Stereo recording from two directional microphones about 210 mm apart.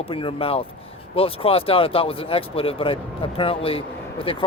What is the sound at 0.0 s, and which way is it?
Speech, 25° left (ahead or behind).